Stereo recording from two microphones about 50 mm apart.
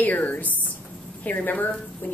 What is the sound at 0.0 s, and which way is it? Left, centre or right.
A woman's voice, left.